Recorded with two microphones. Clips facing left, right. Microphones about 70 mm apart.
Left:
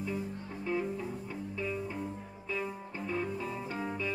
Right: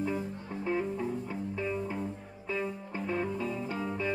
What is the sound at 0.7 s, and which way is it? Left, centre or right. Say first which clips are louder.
Music: right 3 dB; right.